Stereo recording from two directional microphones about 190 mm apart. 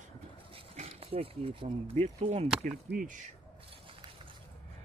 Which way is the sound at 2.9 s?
45° right (ahead or behind).